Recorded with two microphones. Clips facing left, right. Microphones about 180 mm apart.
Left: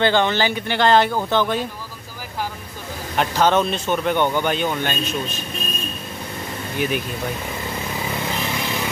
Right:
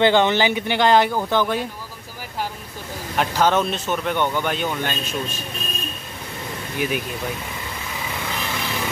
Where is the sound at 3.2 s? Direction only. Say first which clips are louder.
Left 1 dB; 5° right (ahead or behind).